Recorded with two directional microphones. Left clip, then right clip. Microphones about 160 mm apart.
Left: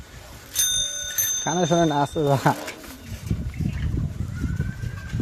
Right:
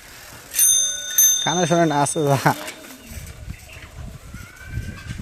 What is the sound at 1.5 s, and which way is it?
Speech, 10° right (ahead or behind).